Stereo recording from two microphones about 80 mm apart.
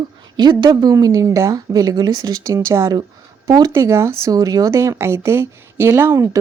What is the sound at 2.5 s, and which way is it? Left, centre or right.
Speech, right.